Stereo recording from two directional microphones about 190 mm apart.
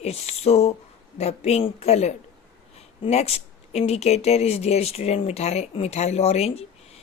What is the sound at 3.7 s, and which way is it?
Speech, 35° left (ahead or behind).